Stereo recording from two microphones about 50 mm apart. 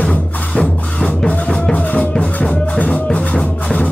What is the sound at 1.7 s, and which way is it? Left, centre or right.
Music, left.